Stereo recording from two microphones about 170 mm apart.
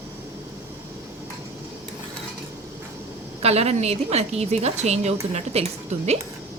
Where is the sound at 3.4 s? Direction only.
40° right (ahead or behind).